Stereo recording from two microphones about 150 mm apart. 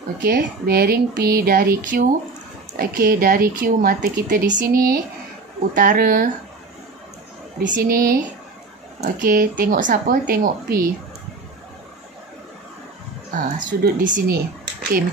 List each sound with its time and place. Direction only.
0.2 s speech: 90° right; by 6.3 s 70° right (ahead or behind)
7.5 s speech: 70° right (ahead or behind)
13.3 s speech: 60° right (ahead or behind)